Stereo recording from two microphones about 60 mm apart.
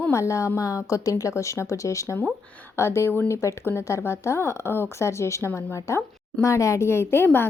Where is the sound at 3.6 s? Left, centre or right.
Left.